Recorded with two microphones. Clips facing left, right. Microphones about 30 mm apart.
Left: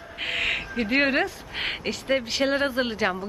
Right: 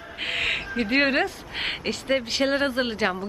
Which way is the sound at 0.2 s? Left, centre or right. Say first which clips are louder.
Even; centre.